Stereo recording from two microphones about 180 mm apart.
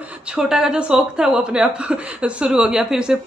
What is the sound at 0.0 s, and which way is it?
A woman's voice, 5° right (ahead or behind).